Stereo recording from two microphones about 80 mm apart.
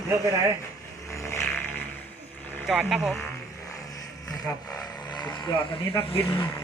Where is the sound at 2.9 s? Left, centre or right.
Centre.